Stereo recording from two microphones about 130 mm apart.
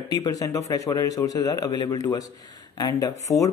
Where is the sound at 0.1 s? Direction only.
25° left (ahead or behind).